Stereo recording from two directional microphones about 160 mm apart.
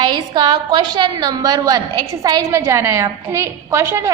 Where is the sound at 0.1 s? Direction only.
30° right (ahead or behind).